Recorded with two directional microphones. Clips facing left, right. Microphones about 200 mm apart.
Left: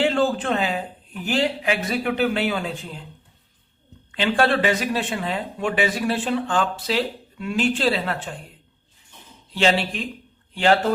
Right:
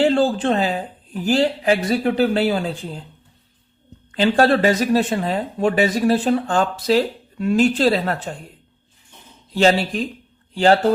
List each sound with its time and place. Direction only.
0.0 s speech: 35° right (ahead or behind)
4.1 s speech: 40° right (ahead or behind)
9.6 s speech: 40° right (ahead or behind)